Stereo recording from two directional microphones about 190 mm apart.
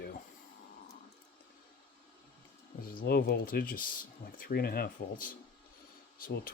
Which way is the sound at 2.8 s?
50° left (ahead or behind).